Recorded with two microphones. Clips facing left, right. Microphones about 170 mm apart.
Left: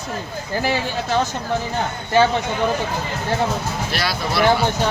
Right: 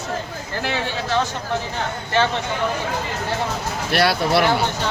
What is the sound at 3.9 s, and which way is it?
Speech, 60° right (ahead or behind).